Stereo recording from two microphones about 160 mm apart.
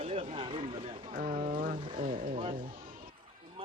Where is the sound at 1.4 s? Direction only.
60° right (ahead or behind).